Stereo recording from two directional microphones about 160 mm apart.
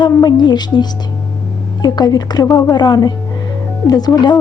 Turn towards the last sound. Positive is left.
turn(degrees=25)  # may be behind; listen again after turning